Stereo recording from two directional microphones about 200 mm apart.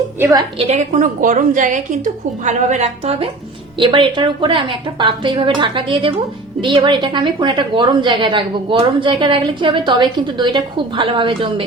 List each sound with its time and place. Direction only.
0.2 s a woman's voice: 15° right (ahead or behind)
0.6 s a woman's voice: 35° right (ahead or behind)